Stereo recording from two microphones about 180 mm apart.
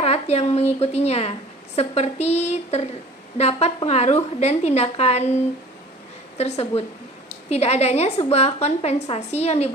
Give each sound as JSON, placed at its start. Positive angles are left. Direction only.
{"t": 0.0, "sound": "a woman's voice", "side_deg": 35}
{"t": 6.3, "sound": "a woman's voice", "side_deg": 35}